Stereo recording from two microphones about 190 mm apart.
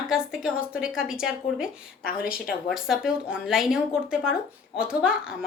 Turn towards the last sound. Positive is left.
turn(degrees=-5)  # may be behind; listen again after turning